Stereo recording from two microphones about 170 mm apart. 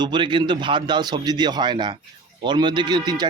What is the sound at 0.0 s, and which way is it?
Speech, 25° right (ahead or behind).